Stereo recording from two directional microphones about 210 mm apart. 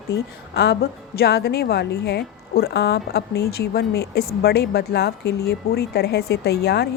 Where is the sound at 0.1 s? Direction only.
50° left (ahead or behind).